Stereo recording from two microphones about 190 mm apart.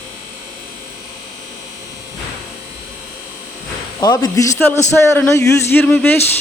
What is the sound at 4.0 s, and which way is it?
Speech, 20° left (ahead or behind).